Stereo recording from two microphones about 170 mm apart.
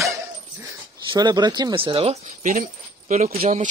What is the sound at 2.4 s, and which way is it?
Keys jangling, 50° right (ahead or behind).